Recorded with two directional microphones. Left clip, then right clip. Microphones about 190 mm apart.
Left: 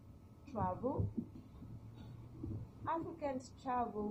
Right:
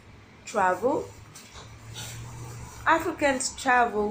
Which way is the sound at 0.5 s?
25° right (ahead or behind).